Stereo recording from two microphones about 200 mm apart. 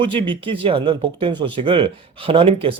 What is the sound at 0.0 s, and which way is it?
Speech, 25° right (ahead or behind).